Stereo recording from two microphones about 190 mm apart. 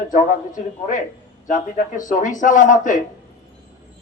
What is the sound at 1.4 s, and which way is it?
A man's voice, 45° left (ahead or behind).